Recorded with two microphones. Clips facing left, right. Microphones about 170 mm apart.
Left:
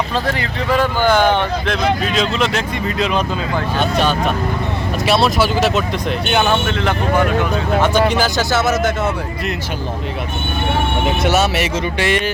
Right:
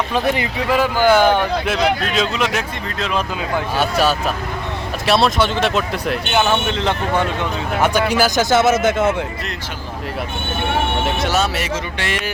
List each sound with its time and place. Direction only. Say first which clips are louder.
0.1 s speech: right 2 dB; 15° right (ahead or behind)
0.7 s speech: right 1 dB; 5° right (ahead or behind)
6.7 s speech: left 1 dB; 20° right (ahead or behind)
7.8 s speech: even; 10° right (ahead or behind)
8.4 s speech: right 2 dB; 20° right (ahead or behind)
11.9 s speech: left 6 dB; centre (ahead or behind)